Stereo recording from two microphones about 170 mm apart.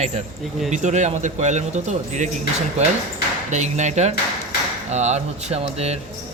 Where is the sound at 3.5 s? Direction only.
45° right (ahead or behind).